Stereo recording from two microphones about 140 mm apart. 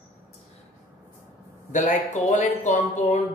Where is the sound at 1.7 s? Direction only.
60° left (ahead or behind).